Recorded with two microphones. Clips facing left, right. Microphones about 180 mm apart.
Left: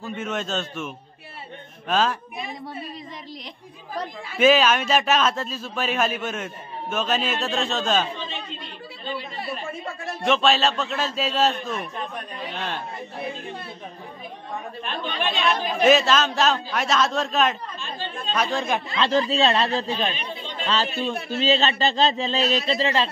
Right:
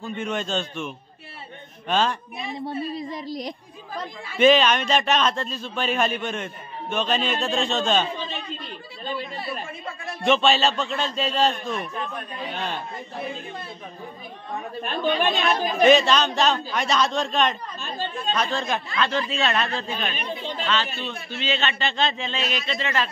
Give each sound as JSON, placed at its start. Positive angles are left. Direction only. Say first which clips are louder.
{"t": 0.0, "sound": "a man's voice", "louder": "right 1 dB", "side_deg": 5}
{"t": 2.6, "sound": "a woman's voice", "louder": "right 6 dB", "side_deg": -35}
{"t": 4.4, "sound": "a man's voice", "louder": "even", "side_deg": 5}
{"t": 10.2, "sound": "a man's voice", "louder": "right 1 dB", "side_deg": 0}
{"t": 14.8, "sound": "speech", "louder": "right 7 dB", "side_deg": -45}
{"t": 15.6, "sound": "a man's voice", "louder": "right 2 dB", "side_deg": 5}
{"t": 18.9, "sound": "a man's voice", "louder": "left 5 dB", "side_deg": 35}